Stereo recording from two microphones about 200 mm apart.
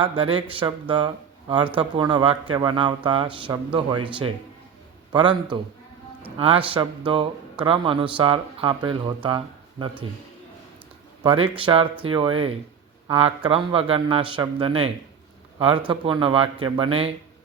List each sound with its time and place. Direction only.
0.0 s speech: 25° right (ahead or behind)
6.2 s speech: 25° right (ahead or behind)
11.2 s speech: 25° right (ahead or behind)
15.9 s speech: 25° right (ahead or behind)